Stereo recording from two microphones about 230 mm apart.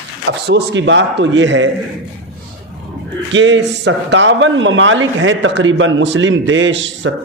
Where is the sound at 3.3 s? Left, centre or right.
Right.